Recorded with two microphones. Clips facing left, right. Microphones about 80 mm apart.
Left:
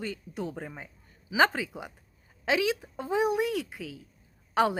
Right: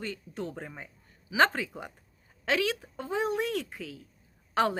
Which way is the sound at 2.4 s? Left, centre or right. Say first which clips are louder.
Left 2 dB; centre.